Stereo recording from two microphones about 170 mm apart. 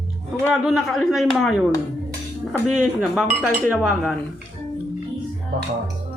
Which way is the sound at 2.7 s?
Centre (ahead or behind).